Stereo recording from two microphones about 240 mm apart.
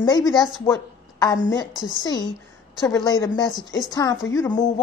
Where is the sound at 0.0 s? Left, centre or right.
Centre.